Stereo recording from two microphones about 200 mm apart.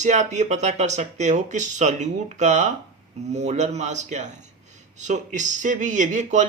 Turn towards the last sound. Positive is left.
turn(degrees=-35)  # may be behind; listen again after turning